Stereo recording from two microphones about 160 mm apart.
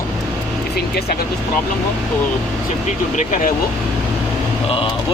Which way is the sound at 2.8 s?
50° left (ahead or behind).